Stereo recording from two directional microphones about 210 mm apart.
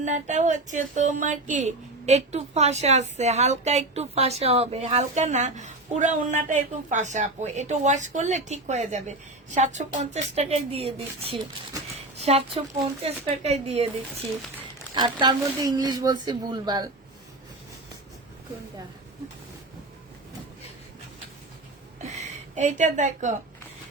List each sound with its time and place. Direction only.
0.0 s speech: 35° right (ahead or behind)
14.9 s speech: 20° right (ahead or behind)
22.0 s a sound: 35° right (ahead or behind)